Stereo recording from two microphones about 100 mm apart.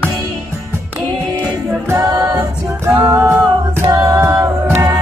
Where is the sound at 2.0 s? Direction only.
35° right (ahead or behind).